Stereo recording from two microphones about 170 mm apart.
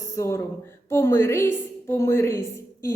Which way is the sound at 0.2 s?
15° left (ahead or behind).